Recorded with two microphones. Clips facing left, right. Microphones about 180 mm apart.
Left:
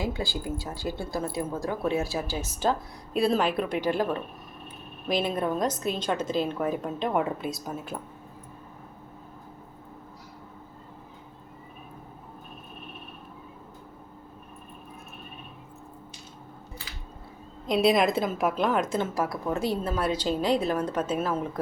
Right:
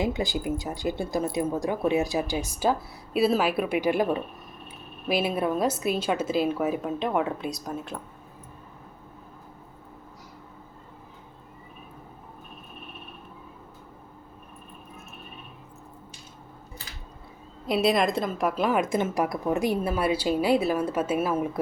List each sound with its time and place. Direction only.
0.0 s speech: 20° right (ahead or behind); by 8.0 s 5° left (ahead or behind)
17.7 s speech: centre (ahead or behind)